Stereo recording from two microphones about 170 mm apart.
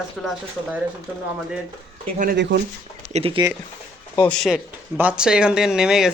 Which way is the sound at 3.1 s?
35° right (ahead or behind).